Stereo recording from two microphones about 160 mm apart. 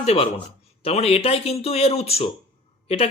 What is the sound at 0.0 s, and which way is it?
A man's voice, 40° left (ahead or behind).